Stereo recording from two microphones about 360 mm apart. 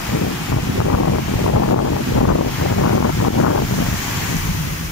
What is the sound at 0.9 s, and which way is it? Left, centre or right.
Wind noise, left.